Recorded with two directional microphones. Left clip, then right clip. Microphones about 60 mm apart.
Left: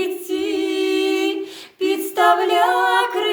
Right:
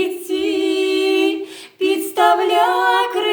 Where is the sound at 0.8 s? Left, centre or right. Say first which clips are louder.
Right 2 dB; left.